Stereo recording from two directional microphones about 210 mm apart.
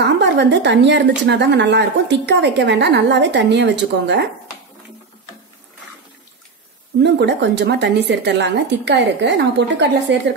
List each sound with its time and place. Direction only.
0.0 s a woman's voice: 55° right (ahead or behind)
7.0 s a woman's voice: 55° right (ahead or behind)